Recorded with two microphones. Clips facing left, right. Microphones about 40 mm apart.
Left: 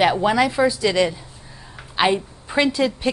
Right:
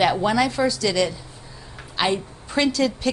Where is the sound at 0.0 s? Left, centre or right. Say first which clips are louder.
Left 2 dB; centre.